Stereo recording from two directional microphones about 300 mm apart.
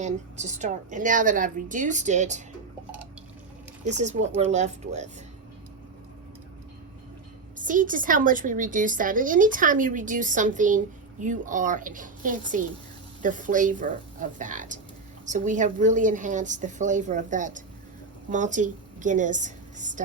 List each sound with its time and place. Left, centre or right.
0.0 s a woman's voice: right
3.8 s a woman's voice: right
7.5 s a woman's voice: right